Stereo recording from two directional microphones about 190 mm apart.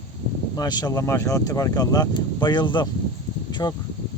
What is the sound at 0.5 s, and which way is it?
Speech, 20° left (ahead or behind).